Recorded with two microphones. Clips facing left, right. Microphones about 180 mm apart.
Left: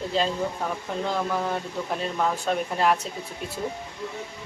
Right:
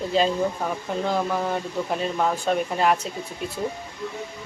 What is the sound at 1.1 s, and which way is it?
Speech, 5° right (ahead or behind).